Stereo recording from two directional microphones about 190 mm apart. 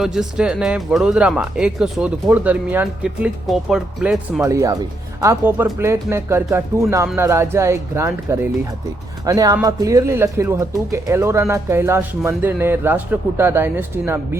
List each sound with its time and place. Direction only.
0.0 s speech: centre (ahead or behind)
4.4 s speech: 15° right (ahead or behind)